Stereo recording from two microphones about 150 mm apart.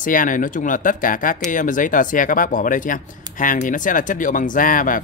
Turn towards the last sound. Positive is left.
turn(degrees=65)  # may be behind; listen again after turning